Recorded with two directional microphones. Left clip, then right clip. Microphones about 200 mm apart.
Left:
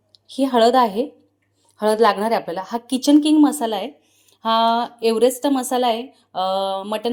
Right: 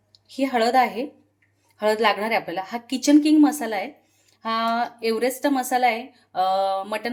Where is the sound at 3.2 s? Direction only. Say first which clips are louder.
Left 1 dB; 20° left (ahead or behind).